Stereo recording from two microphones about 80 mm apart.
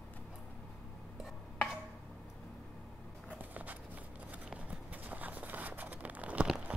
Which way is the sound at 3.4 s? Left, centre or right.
Right.